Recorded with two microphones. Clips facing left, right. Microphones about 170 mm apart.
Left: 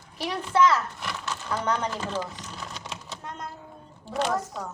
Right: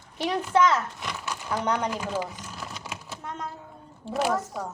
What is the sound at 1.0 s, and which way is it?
Crumpling, 15° right (ahead or behind).